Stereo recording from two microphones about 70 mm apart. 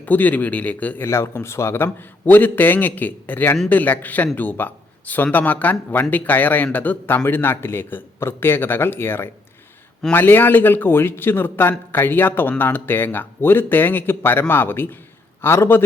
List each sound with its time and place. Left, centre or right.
0.0 s speech: left
1.0 s speech: left